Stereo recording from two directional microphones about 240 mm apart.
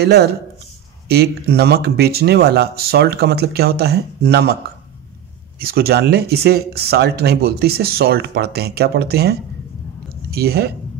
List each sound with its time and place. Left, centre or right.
0.0 s speech: right
5.6 s speech: right